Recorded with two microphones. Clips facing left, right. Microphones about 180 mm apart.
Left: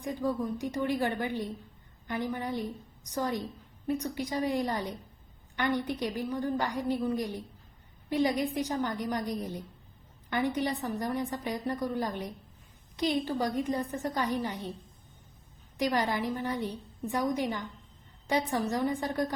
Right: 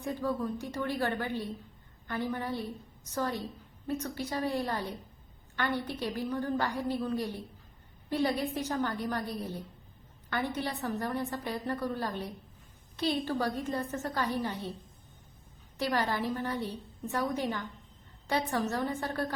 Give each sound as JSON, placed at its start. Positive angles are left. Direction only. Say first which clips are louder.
{"t": 0.0, "sound": "a woman's voice", "louder": "left 1 dB", "side_deg": 15}
{"t": 15.8, "sound": "a woman's voice", "louder": "left 2 dB", "side_deg": 15}